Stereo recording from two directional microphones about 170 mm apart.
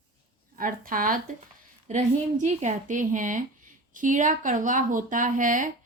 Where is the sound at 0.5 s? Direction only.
55° right (ahead or behind).